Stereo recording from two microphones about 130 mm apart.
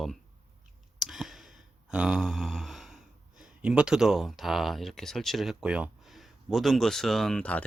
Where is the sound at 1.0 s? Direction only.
Centre (ahead or behind).